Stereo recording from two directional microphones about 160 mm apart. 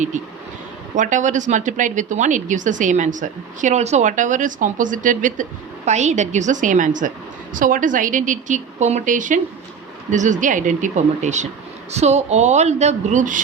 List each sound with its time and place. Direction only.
0.9 s a woman's voice: 50° right (ahead or behind)